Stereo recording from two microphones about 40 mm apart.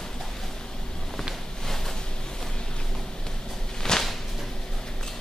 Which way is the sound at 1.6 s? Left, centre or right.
Centre.